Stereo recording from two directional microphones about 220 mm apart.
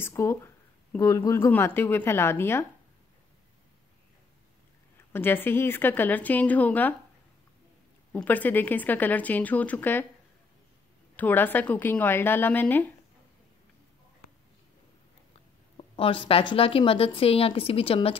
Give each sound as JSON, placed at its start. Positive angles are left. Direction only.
{"t": 0.0, "sound": "a woman's voice", "side_deg": 15}
{"t": 5.1, "sound": "a woman's voice", "side_deg": 10}
{"t": 8.1, "sound": "a woman's voice", "side_deg": 5}
{"t": 11.1, "sound": "a woman's voice", "side_deg": 10}
{"t": 15.8, "sound": "speech", "side_deg": 25}